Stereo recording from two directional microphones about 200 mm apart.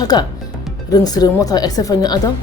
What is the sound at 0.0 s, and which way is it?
Speech, 20° left (ahead or behind).